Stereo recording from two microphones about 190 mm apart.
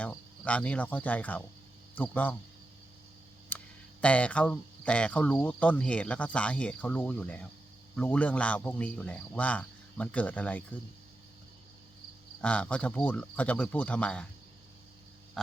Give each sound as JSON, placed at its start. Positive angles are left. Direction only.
{"t": 0.0, "sound": "cricket", "side_deg": 5}
{"t": 2.0, "sound": "speech", "side_deg": 10}
{"t": 3.5, "sound": "a sound", "side_deg": 10}
{"t": 4.0, "sound": "speech", "side_deg": 5}
{"t": 12.4, "sound": "speech", "side_deg": 5}